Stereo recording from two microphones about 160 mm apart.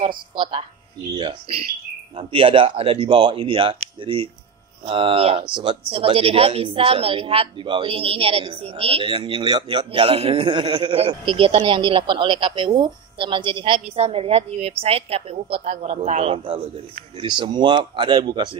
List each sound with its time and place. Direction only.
0.0 s a woman's voice: 30° right (ahead or behind)